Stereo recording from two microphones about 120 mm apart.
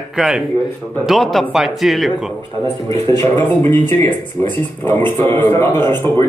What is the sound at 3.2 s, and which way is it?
A man's voice, 20° left (ahead or behind).